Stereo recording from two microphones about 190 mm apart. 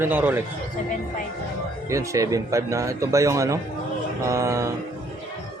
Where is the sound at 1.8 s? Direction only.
15° right (ahead or behind).